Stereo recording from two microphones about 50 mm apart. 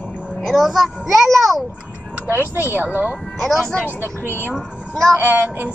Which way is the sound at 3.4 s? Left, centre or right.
Centre.